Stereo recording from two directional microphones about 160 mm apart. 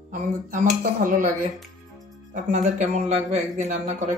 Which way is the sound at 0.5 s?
55° right (ahead or behind).